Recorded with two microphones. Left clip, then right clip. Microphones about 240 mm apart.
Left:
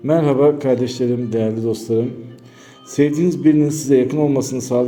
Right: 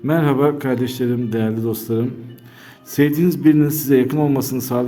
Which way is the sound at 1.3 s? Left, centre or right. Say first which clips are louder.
Left 3 dB; right.